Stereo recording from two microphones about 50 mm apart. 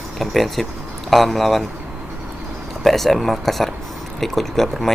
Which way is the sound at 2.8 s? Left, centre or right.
Centre.